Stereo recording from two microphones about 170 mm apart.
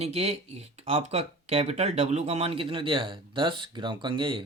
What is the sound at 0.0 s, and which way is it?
Speech, 35° right (ahead or behind).